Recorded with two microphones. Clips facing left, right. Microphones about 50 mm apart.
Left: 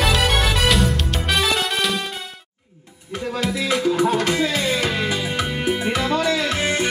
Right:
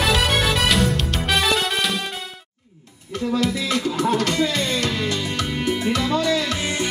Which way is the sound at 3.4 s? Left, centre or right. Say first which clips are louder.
Left 2 dB; centre.